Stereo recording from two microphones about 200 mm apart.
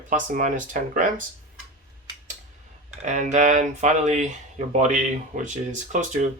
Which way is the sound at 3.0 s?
35° right (ahead or behind).